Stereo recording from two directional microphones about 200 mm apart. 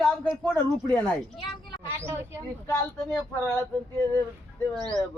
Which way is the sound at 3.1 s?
10° left (ahead or behind).